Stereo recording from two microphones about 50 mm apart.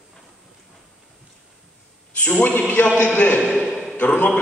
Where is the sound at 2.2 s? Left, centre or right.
Left.